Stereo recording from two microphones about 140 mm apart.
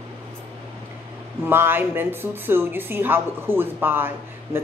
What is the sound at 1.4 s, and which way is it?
A woman's voice, 15° right (ahead or behind).